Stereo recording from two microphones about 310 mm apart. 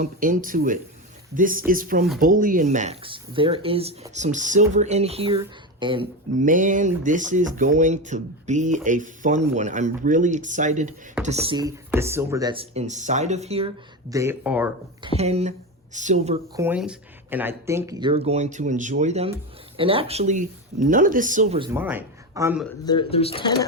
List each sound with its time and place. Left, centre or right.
0.0 s speech: right
14.1 s speech: centre
15.0 s speech: centre
16.6 s speech: centre; by 21.4 s right
21.5 s speech: centre
22.9 s speech: centre